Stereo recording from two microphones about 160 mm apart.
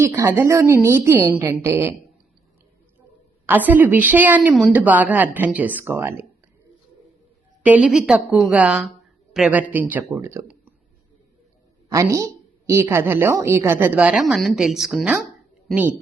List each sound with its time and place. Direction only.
0.0 s a woman's voice: 15° right (ahead or behind)
3.4 s a woman's voice: 10° right (ahead or behind)
7.6 s a woman's voice: 10° right (ahead or behind)
11.9 s a woman's voice: 20° right (ahead or behind); by 15.3 s 5° right (ahead or behind)